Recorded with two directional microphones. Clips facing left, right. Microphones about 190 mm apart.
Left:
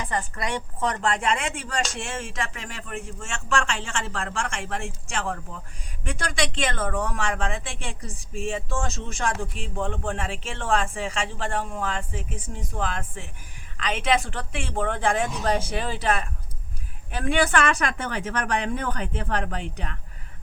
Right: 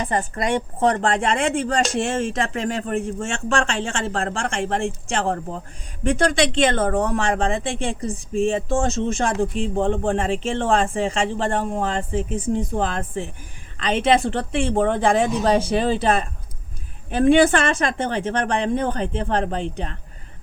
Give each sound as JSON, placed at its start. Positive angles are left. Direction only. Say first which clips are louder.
{"t": 0.3, "sound": "speech", "louder": "right 7 dB", "side_deg": -25}